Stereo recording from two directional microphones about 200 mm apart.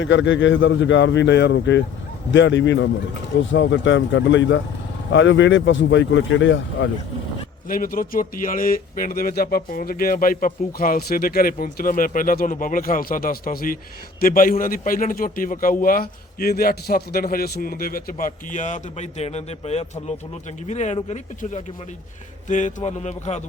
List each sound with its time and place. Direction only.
0.0 s speech: 70° left (ahead or behind)
7.7 s a man's voice: 45° left (ahead or behind)